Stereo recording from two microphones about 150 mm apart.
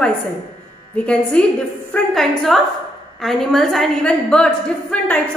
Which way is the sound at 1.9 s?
Centre (ahead or behind).